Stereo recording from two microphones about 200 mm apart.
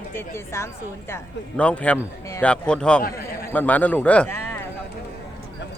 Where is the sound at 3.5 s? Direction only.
10° left (ahead or behind).